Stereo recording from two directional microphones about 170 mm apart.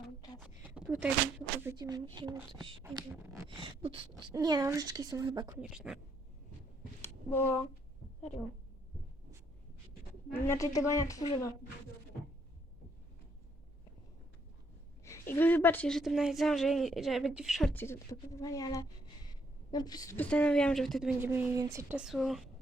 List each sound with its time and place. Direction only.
0.4 s a sound: 10° right (ahead or behind)
1.6 s speech: 25° right (ahead or behind)
5.5 s a woman's voice: 5° right (ahead or behind)
7.0 s a sound: 15° left (ahead or behind)
10.3 s a woman's voice: 15° left (ahead or behind)
15.3 s a woman's voice: 10° left (ahead or behind)
17.7 s a woman's voice: 15° left (ahead or behind)
20.1 s a woman's voice: 5° left (ahead or behind); by 21.9 s 15° right (ahead or behind)
21.9 s a woman's voice: centre (ahead or behind)